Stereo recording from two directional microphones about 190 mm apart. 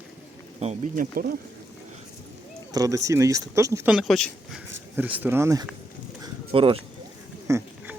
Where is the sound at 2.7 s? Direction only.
20° right (ahead or behind); by 4.6 s centre (ahead or behind).